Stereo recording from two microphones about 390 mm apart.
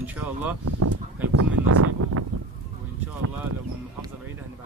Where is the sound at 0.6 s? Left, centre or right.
Right.